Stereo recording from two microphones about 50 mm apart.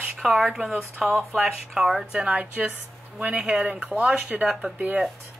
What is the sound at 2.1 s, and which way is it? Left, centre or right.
Speech, right.